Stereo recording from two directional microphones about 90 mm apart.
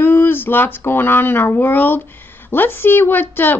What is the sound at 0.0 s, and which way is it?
Speech, 25° left (ahead or behind).